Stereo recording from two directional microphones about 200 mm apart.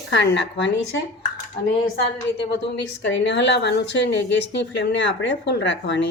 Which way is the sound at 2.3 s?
55° left (ahead or behind).